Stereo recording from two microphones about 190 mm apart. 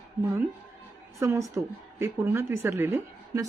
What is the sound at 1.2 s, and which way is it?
A woman's voice, 15° right (ahead or behind).